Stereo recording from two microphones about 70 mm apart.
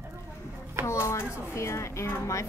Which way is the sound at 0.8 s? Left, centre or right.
Left.